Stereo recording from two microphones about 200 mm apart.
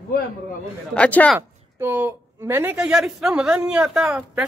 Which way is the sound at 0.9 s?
5° left (ahead or behind).